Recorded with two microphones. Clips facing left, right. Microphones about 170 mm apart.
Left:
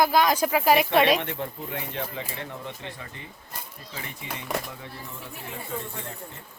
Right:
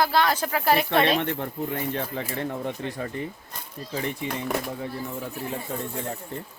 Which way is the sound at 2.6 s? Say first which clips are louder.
Right 8 dB; 45° right (ahead or behind).